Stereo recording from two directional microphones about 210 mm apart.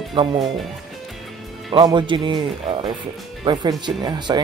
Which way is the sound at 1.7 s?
20° right (ahead or behind).